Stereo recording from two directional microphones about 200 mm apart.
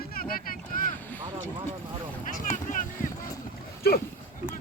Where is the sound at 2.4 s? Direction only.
40° left (ahead or behind).